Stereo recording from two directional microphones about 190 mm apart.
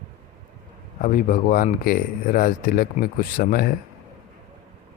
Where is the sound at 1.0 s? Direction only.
45° left (ahead or behind).